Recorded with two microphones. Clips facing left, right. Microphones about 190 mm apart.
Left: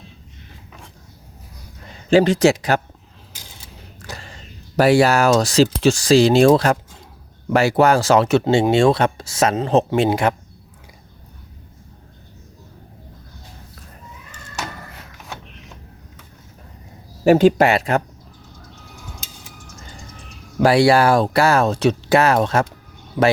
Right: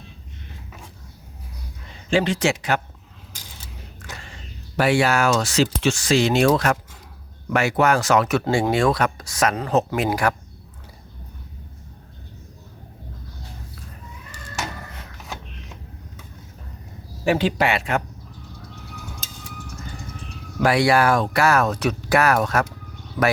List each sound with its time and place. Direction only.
2.0 s speech: 40° left (ahead or behind)
4.0 s a sound: 35° left (ahead or behind)
4.8 s speech: 40° left (ahead or behind)
17.2 s speech: 45° left (ahead or behind)
20.6 s speech: 30° left (ahead or behind)